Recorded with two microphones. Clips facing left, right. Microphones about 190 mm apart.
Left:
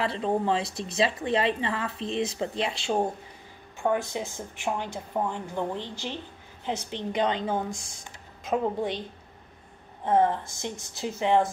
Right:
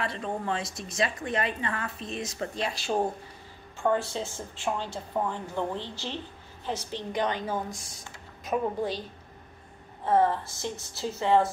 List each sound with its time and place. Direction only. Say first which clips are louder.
0.0 s speech: left 6 dB; 30° left (ahead or behind)
3.8 s a woman's voice: even; 15° left (ahead or behind)
10.0 s a woman's voice: left 1 dB; 20° left (ahead or behind)